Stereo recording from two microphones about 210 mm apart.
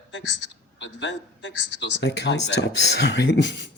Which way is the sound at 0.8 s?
60° left (ahead or behind).